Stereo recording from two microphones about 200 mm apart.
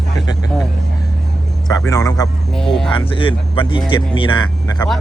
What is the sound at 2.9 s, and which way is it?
Speech, 25° left (ahead or behind).